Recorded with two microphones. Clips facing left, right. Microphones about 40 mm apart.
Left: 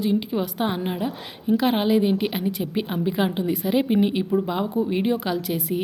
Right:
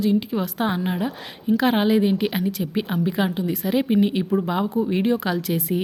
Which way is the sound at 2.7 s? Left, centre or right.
Centre.